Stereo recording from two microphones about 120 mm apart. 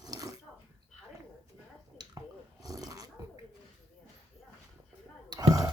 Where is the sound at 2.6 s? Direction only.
30° right (ahead or behind).